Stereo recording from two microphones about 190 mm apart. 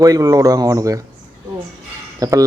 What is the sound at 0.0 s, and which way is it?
A man's voice, 20° right (ahead or behind).